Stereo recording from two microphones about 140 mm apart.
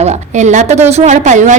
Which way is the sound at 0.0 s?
55° right (ahead or behind).